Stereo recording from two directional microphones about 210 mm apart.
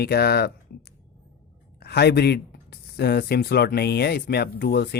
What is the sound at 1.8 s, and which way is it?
Speech, 50° left (ahead or behind).